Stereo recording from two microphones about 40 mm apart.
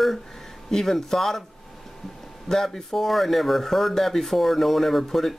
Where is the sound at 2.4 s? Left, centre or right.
Centre.